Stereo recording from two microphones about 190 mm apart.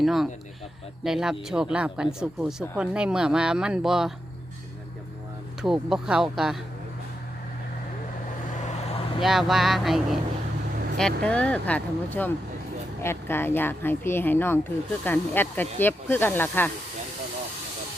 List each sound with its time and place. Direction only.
0.0 s speech: centre (ahead or behind)
5.6 s speech: centre (ahead or behind)
9.2 s speech: centre (ahead or behind)